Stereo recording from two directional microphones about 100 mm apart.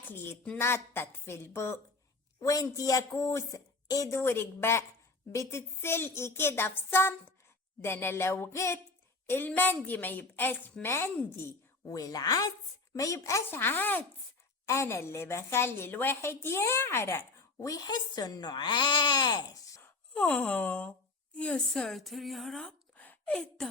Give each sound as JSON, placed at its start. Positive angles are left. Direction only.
{"t": 0.0, "sound": "a woman's voice", "side_deg": 20}
{"t": 4.2, "sound": "a woman's voice", "side_deg": 25}
{"t": 11.9, "sound": "speech", "side_deg": 35}
{"t": 13.6, "sound": "a woman's voice", "side_deg": 20}
{"t": 17.7, "sound": "speech", "side_deg": 40}
{"t": 19.8, "sound": "a woman's voice", "side_deg": 15}
{"t": 23.0, "sound": "a sound", "side_deg": 15}